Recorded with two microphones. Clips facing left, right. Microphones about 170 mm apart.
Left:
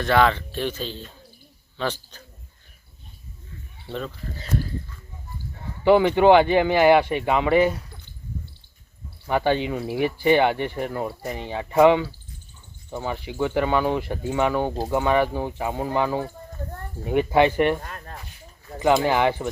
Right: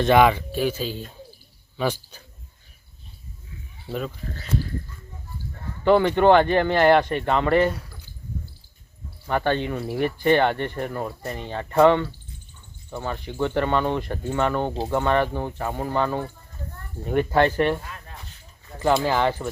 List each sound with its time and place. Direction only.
0.0 s speech: 15° right (ahead or behind)
3.8 s speech: 5° right (ahead or behind)
5.8 s speech: 10° left (ahead or behind)
9.2 s speech: 10° left (ahead or behind)
17.8 s a sound: 45° left (ahead or behind)
18.8 s speech: 15° left (ahead or behind)